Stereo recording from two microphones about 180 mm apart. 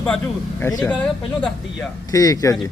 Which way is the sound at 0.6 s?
20° left (ahead or behind).